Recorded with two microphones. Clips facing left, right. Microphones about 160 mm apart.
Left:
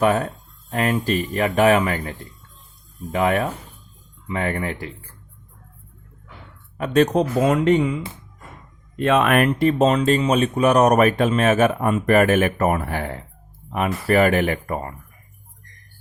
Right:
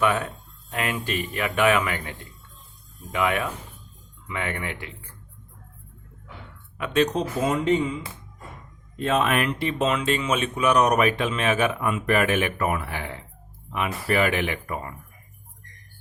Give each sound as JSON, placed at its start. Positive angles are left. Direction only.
{"t": 0.0, "sound": "speech", "side_deg": 40}
{"t": 6.7, "sound": "speech", "side_deg": 40}
{"t": 7.1, "sound": "speech", "side_deg": 65}
{"t": 9.0, "sound": "speech", "side_deg": 65}